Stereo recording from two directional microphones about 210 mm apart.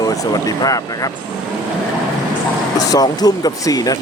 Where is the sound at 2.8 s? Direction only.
15° left (ahead or behind).